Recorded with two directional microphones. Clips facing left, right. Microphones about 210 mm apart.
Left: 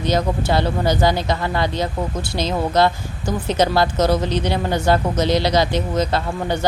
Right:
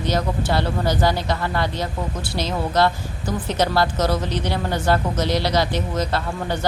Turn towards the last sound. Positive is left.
turn(degrees=20)  # may be behind; listen again after turning